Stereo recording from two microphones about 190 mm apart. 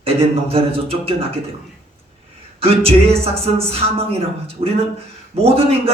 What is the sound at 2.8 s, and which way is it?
Speech, 30° right (ahead or behind).